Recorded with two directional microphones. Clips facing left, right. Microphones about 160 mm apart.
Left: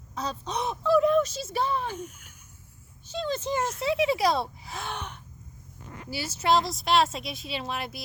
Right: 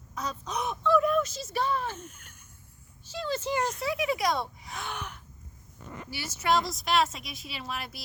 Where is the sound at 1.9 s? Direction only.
10° left (ahead or behind).